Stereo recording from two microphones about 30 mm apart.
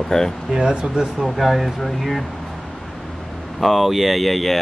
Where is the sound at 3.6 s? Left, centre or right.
Centre.